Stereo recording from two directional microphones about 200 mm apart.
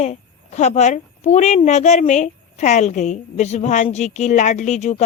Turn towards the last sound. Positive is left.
turn(degrees=35)  # may be behind; listen again after turning